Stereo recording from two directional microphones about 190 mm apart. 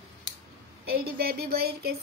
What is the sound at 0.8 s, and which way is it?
Speech, 55° right (ahead or behind).